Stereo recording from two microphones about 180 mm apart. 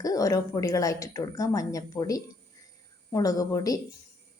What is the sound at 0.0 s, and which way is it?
Speech, 20° left (ahead or behind).